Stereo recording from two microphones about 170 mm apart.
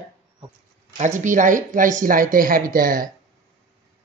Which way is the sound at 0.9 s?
45° right (ahead or behind).